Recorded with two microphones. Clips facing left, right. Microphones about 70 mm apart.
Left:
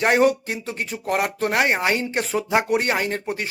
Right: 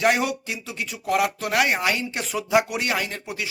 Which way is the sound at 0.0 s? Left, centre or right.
Left.